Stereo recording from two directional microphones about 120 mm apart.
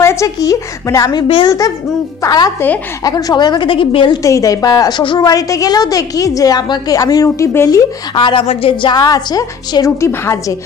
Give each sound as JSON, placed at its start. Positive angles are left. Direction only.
{"t": 0.0, "sound": "a woman's voice", "side_deg": 25}
{"t": 4.2, "sound": "a woman's voice", "side_deg": 25}
{"t": 8.1, "sound": "a woman's voice", "side_deg": 40}
{"t": 8.9, "sound": "a woman's voice", "side_deg": 30}